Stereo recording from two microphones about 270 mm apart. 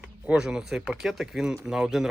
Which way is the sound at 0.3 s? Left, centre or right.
Centre.